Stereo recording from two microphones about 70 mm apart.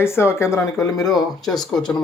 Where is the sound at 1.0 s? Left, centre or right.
Left.